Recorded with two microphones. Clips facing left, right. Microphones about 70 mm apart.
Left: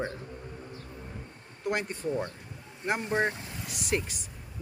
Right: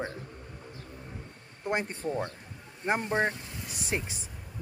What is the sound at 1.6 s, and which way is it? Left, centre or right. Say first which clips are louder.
Speech: even; right.